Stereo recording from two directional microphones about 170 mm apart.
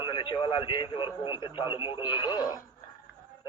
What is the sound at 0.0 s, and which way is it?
Speech, 30° left (ahead or behind).